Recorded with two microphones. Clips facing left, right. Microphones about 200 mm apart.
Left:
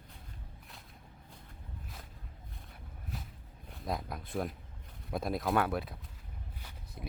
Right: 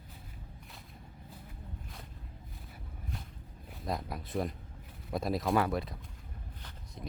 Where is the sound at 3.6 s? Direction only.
Centre (ahead or behind).